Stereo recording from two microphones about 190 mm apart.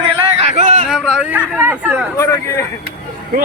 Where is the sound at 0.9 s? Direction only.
Centre (ahead or behind).